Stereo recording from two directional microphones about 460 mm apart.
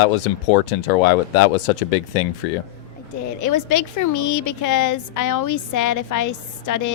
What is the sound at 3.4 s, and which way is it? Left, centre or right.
A woman's voice, left.